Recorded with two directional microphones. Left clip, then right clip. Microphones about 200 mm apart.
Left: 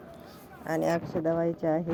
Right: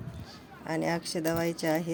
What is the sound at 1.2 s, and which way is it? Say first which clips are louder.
Speech: left 2 dB; 20° right (ahead or behind).